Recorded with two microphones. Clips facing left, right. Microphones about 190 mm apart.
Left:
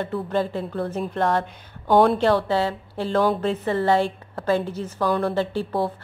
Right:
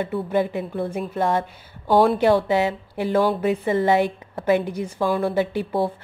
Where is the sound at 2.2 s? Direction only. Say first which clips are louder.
Right 2 dB; 15° right (ahead or behind).